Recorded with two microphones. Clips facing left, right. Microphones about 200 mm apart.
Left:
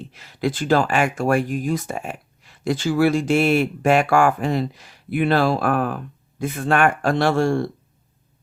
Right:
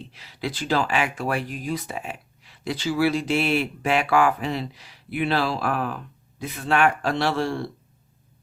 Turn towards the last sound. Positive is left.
turn(degrees=50)  # may be behind; listen again after turning